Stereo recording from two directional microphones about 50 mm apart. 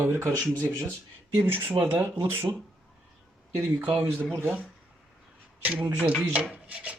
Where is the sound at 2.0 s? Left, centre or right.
Right.